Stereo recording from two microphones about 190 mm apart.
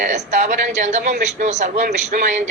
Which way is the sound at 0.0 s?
40° right (ahead or behind).